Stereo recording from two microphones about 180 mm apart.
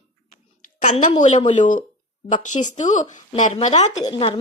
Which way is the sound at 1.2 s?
40° left (ahead or behind).